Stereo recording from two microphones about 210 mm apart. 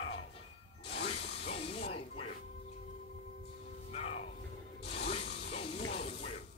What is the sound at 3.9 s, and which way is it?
Music, 30° left (ahead or behind).